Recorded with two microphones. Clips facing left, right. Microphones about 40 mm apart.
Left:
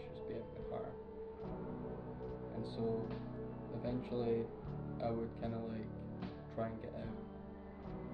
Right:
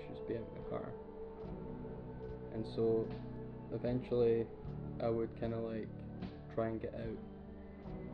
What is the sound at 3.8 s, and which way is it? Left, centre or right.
Speech, right.